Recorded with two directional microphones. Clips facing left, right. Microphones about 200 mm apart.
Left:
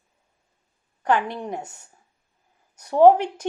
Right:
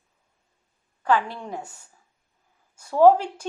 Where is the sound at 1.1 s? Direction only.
20° left (ahead or behind).